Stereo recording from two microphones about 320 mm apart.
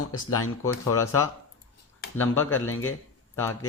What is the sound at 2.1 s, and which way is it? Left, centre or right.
Speech, centre.